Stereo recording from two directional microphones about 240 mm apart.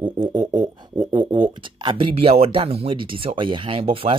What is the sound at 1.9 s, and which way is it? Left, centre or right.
Speech, right.